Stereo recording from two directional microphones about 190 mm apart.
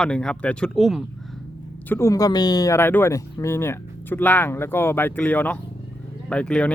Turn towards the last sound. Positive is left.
turn(degrees=5)  # may be behind; listen again after turning